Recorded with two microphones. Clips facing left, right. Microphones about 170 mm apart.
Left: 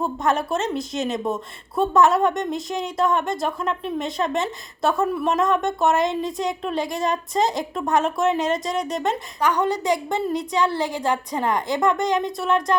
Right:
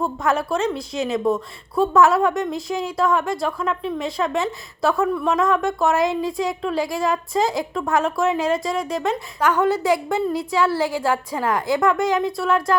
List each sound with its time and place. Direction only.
0.0 s a woman's voice: centre (ahead or behind)
1.2 s speech: 20° left (ahead or behind)
2.0 s a woman's voice: centre (ahead or behind)